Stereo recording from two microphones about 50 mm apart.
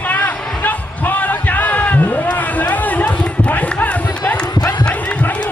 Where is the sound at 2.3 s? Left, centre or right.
Left.